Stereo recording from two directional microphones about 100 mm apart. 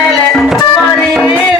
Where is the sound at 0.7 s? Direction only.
10° left (ahead or behind).